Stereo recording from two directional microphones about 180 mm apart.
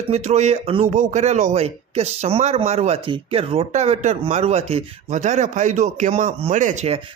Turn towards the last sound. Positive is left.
turn(degrees=-40)  # may be behind; listen again after turning